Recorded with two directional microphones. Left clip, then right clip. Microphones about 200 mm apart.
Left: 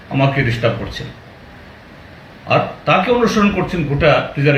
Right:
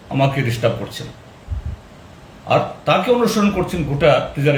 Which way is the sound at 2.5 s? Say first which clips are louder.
Left 2 dB; 5° right (ahead or behind).